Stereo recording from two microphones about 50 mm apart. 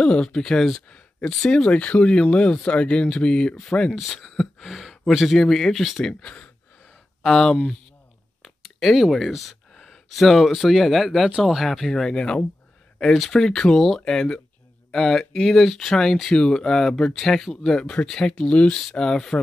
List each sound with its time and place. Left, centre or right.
0.0 s speech: centre
1.5 s speech: left
3.9 s speech: centre
5.4 s speech: centre
5.8 s speech: centre
6.2 s speech: left
8.8 s speech: centre